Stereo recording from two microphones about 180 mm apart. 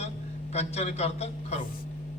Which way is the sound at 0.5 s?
35° left (ahead or behind).